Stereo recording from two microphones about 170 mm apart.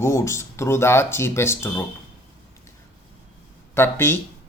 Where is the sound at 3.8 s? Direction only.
15° left (ahead or behind).